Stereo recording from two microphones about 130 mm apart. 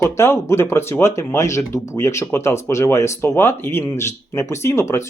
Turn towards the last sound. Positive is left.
turn(degrees=20)  # may be behind; listen again after turning